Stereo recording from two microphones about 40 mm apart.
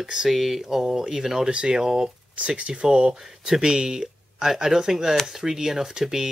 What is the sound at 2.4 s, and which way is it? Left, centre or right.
Speech, right.